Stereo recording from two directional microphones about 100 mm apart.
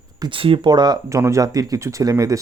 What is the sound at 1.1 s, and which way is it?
Speech, 30° right (ahead or behind).